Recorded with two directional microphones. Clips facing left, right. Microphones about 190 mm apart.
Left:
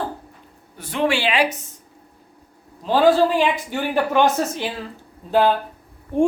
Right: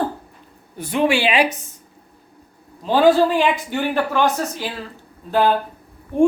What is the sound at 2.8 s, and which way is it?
Speech, centre (ahead or behind).